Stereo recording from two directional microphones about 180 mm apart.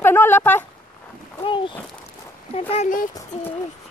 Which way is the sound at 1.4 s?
25° left (ahead or behind).